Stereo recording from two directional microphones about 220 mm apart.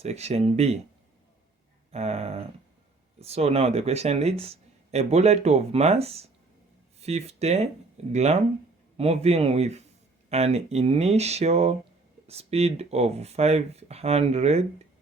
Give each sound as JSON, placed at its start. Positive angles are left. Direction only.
{"t": 0.0, "sound": "speech", "side_deg": -30}
{"t": 1.9, "sound": "speech", "side_deg": -30}